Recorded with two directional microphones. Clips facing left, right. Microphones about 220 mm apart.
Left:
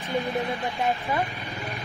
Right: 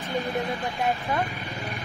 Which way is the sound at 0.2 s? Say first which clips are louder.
Even; centre (ahead or behind).